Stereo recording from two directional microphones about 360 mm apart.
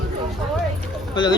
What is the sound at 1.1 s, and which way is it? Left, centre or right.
Speech, centre.